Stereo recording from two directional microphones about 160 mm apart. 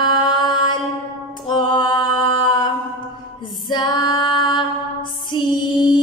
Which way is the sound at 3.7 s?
25° left (ahead or behind).